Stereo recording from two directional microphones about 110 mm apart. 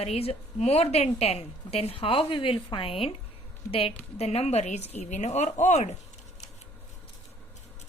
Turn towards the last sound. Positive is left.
turn(degrees=90)